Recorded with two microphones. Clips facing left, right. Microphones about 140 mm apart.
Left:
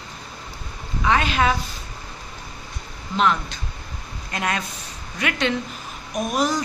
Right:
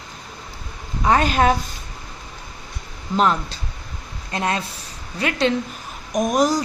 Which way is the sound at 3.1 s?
35° right (ahead or behind).